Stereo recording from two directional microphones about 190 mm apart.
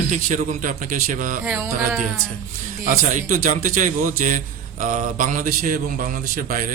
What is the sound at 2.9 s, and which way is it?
A man's voice, 45° right (ahead or behind).